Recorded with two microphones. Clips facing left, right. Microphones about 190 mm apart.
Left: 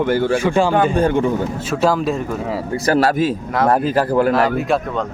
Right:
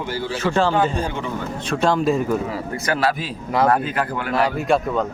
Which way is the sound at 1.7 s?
5° left (ahead or behind).